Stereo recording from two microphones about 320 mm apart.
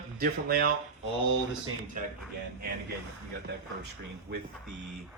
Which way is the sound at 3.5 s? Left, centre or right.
Right.